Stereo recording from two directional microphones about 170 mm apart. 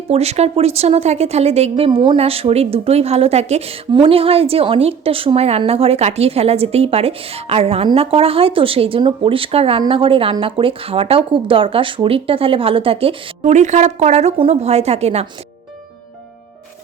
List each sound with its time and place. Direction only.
0.1 s speech: 40° right (ahead or behind)